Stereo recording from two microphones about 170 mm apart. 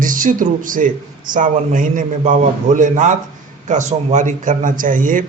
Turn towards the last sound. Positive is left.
turn(degrees=-50)  # may be behind; listen again after turning